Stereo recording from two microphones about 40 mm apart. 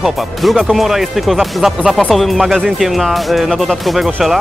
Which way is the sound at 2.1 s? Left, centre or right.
Centre.